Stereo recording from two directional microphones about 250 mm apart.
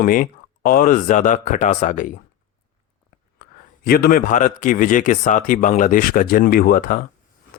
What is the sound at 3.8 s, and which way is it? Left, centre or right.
Speech, left.